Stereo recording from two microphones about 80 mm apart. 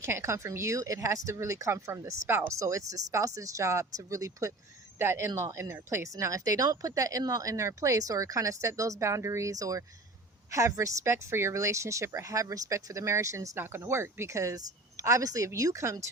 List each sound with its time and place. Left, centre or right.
0.0 s speech: right
13.6 s speech: right